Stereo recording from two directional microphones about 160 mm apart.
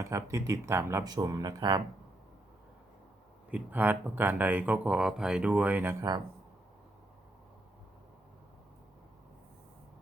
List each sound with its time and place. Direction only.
0.0 s speech: 20° right (ahead or behind)
3.5 s speech: 10° right (ahead or behind)